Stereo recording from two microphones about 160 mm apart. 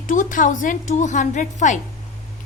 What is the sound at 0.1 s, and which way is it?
A woman's voice, 55° left (ahead or behind).